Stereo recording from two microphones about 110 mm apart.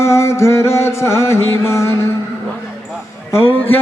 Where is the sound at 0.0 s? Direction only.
25° left (ahead or behind).